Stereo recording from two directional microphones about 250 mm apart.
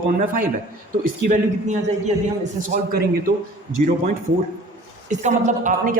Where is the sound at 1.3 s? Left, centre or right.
Right.